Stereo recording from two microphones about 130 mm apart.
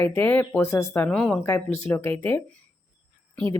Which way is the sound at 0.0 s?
15° left (ahead or behind).